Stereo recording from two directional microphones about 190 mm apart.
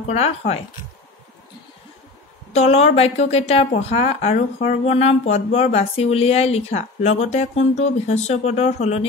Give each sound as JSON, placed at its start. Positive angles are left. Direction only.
{"t": 0.0, "sound": "speech", "side_deg": 35}
{"t": 2.5, "sound": "a woman's voice", "side_deg": 35}